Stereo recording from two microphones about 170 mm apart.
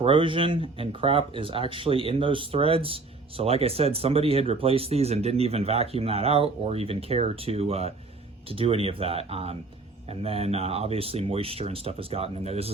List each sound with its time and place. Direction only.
0.0 s speech: 30° right (ahead or behind)